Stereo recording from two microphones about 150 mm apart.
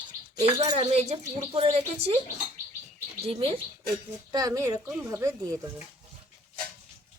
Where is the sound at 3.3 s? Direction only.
40° right (ahead or behind).